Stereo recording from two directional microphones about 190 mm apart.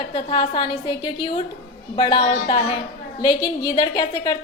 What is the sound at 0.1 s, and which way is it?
A woman's voice, 25° left (ahead or behind).